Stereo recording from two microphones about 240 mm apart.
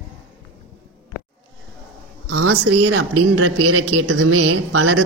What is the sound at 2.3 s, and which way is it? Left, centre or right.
Speech, right.